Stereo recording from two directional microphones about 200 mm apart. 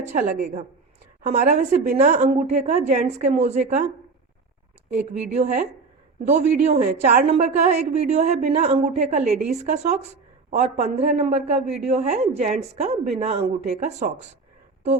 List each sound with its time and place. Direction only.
0.0 s speech: 35° right (ahead or behind)
4.9 s speech: 40° right (ahead or behind)